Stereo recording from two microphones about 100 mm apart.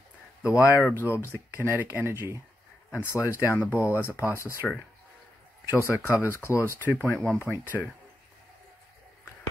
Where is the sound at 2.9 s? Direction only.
25° left (ahead or behind).